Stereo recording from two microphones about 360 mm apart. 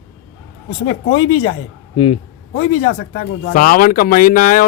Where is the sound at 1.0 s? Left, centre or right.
Centre.